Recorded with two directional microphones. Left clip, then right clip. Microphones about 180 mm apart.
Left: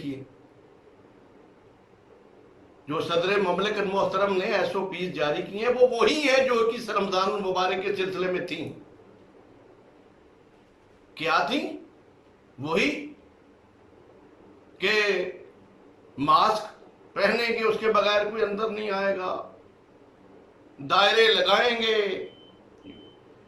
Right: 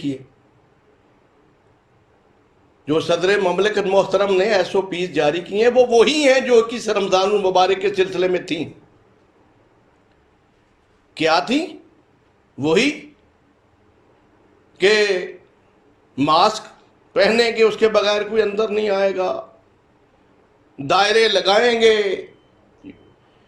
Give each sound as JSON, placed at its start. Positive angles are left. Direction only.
{"t": 2.8, "sound": "a man's voice", "side_deg": -50}
{"t": 11.1, "sound": "a man's voice", "side_deg": -50}
{"t": 14.8, "sound": "a man's voice", "side_deg": -50}
{"t": 16.1, "sound": "a man's voice", "side_deg": -50}
{"t": 20.8, "sound": "a man's voice", "side_deg": -50}